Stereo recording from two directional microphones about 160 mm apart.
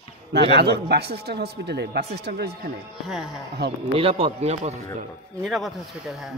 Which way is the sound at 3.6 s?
90° right.